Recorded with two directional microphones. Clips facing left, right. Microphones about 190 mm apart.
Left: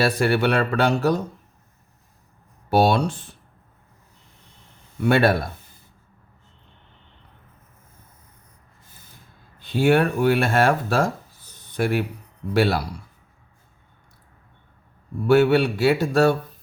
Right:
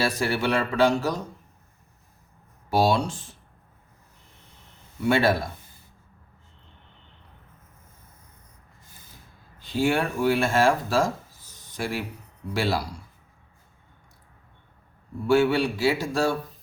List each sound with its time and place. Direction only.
0.0 s speech: 60° left (ahead or behind)
2.6 s speech: 60° left (ahead or behind)
5.0 s speech: 60° left (ahead or behind)
9.6 s speech: 60° left (ahead or behind)
11.5 s a sound: 60° left (ahead or behind)
12.5 s speech: 60° left (ahead or behind)
15.3 s speech: 60° left (ahead or behind)